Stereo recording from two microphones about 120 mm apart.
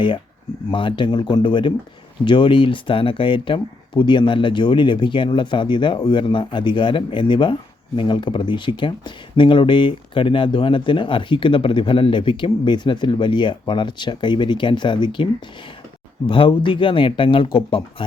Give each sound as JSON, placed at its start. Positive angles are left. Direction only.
{"t": 0.7, "sound": "speech", "side_deg": 45}